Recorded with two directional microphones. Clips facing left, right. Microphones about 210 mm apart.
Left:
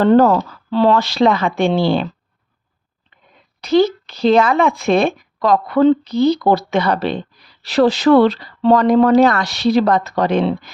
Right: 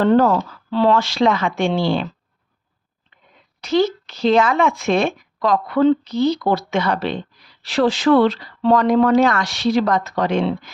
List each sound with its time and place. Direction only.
0.0 s a woman's voice: 40° left (ahead or behind)
3.6 s a child's voice: 35° left (ahead or behind)